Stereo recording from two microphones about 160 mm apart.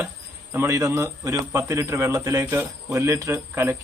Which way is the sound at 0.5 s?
15° right (ahead or behind).